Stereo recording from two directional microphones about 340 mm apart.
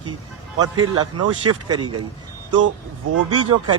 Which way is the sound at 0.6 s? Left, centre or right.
Right.